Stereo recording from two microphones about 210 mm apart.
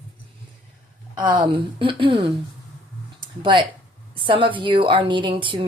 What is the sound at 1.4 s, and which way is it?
Speech, 25° right (ahead or behind).